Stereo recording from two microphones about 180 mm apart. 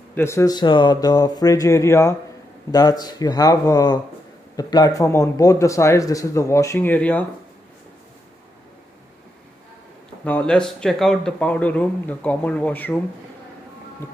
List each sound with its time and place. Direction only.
0.1 s speech: 15° left (ahead or behind)
10.2 s speech: 5° left (ahead or behind)